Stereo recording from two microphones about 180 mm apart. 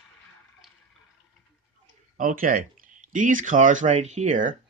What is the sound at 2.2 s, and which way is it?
Speech, 50° right (ahead or behind).